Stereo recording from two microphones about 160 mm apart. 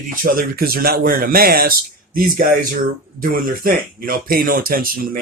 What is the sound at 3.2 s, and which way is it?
Speech, 60° right (ahead or behind).